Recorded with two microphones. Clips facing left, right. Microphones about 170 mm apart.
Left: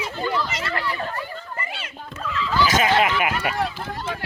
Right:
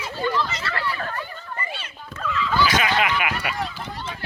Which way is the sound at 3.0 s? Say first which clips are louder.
Left 2 dB; 45° left (ahead or behind).